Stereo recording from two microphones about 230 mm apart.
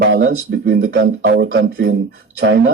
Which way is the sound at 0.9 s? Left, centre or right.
Right.